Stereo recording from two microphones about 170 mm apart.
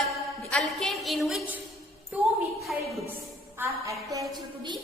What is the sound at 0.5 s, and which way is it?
A woman's voice, centre (ahead or behind).